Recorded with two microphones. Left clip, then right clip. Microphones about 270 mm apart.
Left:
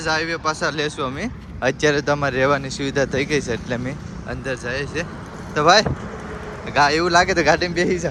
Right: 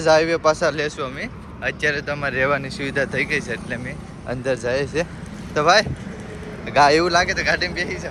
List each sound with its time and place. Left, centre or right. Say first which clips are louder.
0.0 s speech: right 6 dB; centre; by 8.0 s left